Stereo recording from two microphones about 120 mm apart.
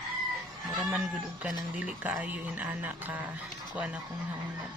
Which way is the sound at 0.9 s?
10° right (ahead or behind).